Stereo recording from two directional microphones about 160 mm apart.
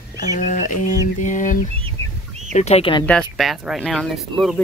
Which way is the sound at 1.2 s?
55° left (ahead or behind).